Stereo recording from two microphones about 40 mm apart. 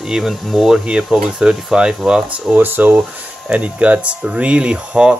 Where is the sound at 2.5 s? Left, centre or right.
Right.